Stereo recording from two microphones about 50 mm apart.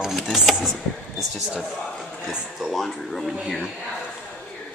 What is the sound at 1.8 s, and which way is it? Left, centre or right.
Music, centre.